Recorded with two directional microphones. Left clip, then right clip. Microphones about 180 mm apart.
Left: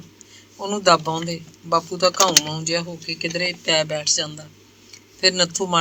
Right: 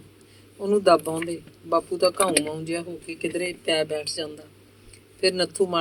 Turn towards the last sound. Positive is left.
turn(degrees=25)  # may be behind; listen again after turning